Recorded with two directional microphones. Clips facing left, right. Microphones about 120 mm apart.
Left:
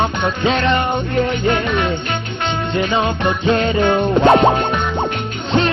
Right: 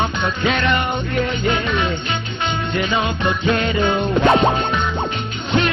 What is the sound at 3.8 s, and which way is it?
Music, 50° left (ahead or behind).